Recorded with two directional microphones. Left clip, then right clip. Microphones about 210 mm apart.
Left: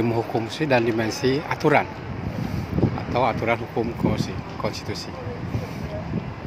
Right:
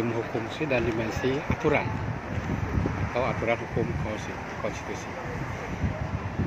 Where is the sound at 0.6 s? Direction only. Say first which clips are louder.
Left 6 dB; 40° left (ahead or behind).